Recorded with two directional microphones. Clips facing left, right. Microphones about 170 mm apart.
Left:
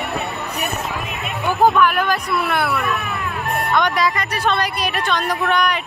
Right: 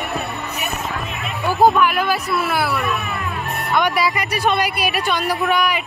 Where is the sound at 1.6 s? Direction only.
10° right (ahead or behind).